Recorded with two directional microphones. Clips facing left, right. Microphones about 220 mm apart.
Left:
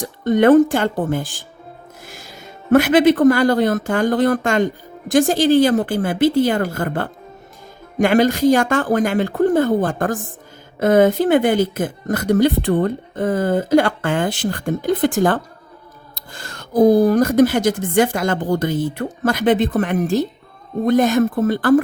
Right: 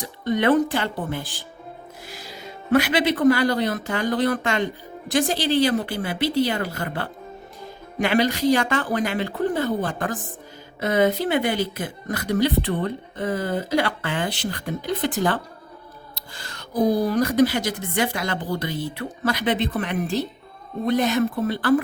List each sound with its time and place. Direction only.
0.0 s speech: 50° left (ahead or behind)